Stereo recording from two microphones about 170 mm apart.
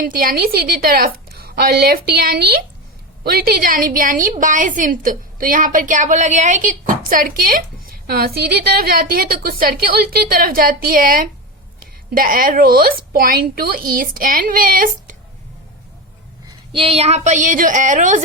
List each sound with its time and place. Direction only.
0.0 s a woman's voice: 55° right (ahead or behind)
16.5 s a woman's voice: 30° right (ahead or behind); by 18.2 s 50° right (ahead or behind)